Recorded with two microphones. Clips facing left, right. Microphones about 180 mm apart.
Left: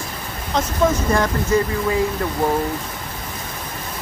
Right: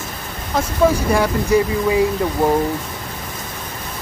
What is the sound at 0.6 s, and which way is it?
Speech, 10° right (ahead or behind).